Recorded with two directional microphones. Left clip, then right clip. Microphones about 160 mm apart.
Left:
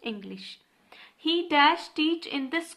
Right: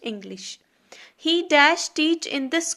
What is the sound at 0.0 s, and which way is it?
A woman's voice, 30° right (ahead or behind).